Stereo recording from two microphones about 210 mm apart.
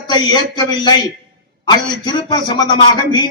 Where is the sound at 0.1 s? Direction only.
20° left (ahead or behind).